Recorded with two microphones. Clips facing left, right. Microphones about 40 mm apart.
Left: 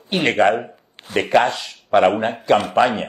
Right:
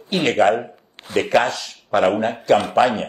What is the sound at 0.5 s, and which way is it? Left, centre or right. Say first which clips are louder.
Speech: even; centre.